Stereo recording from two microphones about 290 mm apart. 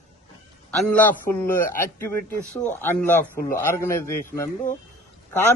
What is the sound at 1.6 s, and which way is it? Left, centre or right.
Speech, left.